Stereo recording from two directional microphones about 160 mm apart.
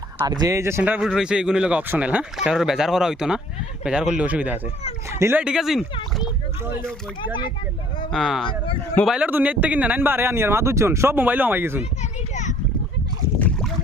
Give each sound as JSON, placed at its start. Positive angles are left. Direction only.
{"t": 0.3, "sound": "speech", "side_deg": -25}
{"t": 4.8, "sound": "speech", "side_deg": 40}
{"t": 5.2, "sound": "speech", "side_deg": -10}
{"t": 8.1, "sound": "speech", "side_deg": 0}
{"t": 8.4, "sound": "speech", "side_deg": 35}
{"t": 9.0, "sound": "speech", "side_deg": -10}
{"t": 12.3, "sound": "a sound", "side_deg": 50}